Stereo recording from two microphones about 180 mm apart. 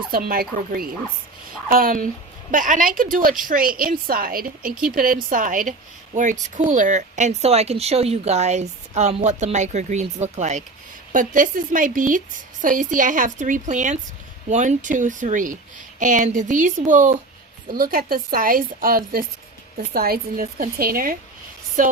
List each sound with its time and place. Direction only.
0.1 s speech: 55° right (ahead or behind)